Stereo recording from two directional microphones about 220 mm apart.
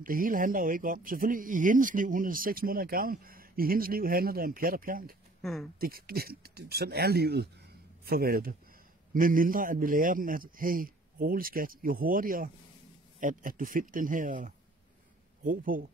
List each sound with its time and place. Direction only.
0.0 s speech: 40° right (ahead or behind)
5.4 s speech: centre (ahead or behind)
5.8 s speech: 40° right (ahead or behind)